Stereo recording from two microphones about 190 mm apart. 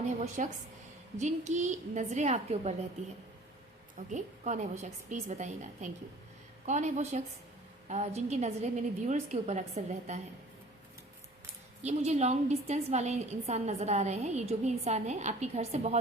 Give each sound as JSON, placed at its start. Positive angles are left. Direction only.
{"t": 0.4, "sound": "a woman's voice", "side_deg": -40}
{"t": 3.9, "sound": "a woman's voice", "side_deg": -40}
{"t": 11.8, "sound": "a woman's voice", "side_deg": -35}